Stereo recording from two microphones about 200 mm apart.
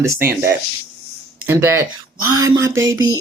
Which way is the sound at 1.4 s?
10° right (ahead or behind).